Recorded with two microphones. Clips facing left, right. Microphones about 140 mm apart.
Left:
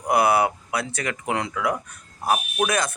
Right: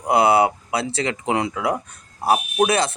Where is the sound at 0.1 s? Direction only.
25° right (ahead or behind).